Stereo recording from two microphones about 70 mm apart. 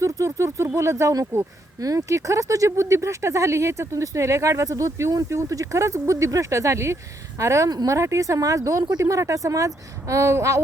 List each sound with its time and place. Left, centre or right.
0.0 s speech: right
1.8 s speech: right